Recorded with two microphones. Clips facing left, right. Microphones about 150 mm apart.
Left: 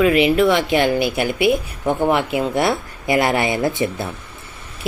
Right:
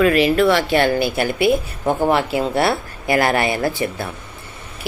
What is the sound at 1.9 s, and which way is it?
Speech, 5° right (ahead or behind).